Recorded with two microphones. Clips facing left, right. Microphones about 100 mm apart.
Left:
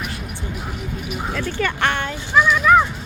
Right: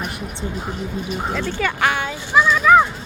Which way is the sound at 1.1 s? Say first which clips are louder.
Right 1 dB; 10° left (ahead or behind).